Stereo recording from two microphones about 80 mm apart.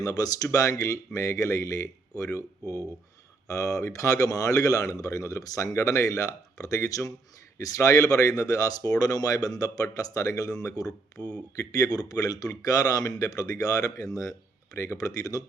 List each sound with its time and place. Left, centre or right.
0.0 s a man's voice: left